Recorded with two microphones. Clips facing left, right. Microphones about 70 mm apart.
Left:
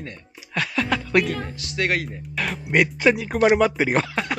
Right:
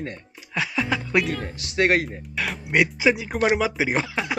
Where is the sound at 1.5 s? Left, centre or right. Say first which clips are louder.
Right 4 dB; right.